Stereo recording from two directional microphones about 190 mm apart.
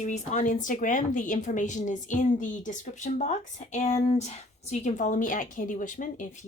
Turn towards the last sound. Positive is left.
turn(degrees=45)  # may be behind; listen again after turning